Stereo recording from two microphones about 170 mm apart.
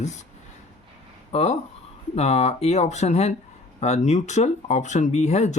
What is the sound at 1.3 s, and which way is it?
Speech, 40° left (ahead or behind).